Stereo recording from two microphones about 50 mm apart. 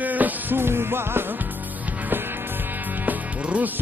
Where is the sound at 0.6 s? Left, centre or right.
Right.